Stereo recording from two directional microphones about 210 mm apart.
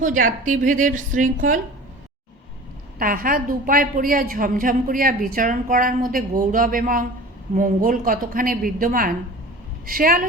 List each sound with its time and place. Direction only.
0.0 s a woman's voice: 40° right (ahead or behind)
3.0 s a woman's voice: 40° right (ahead or behind)